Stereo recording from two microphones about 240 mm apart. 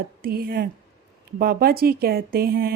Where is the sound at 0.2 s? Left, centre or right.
Right.